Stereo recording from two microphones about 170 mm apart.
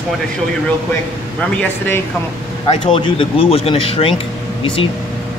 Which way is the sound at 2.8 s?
30° left (ahead or behind).